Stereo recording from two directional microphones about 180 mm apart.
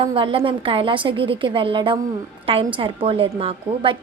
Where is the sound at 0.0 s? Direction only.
30° right (ahead or behind).